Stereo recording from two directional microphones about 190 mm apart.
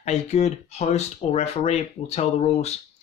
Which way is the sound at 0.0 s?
35° left (ahead or behind).